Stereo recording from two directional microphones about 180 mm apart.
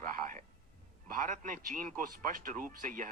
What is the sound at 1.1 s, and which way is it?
Speech, 45° right (ahead or behind).